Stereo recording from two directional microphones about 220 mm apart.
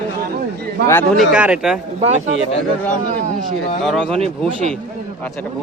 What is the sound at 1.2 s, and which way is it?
Speech, 5° right (ahead or behind).